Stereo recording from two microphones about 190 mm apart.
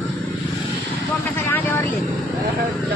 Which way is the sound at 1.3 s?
10° left (ahead or behind).